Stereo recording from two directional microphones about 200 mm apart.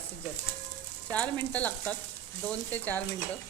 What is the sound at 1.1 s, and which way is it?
Speech, 5° left (ahead or behind).